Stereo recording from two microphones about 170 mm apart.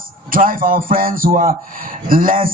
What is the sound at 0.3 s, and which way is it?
Speech, 55° right (ahead or behind).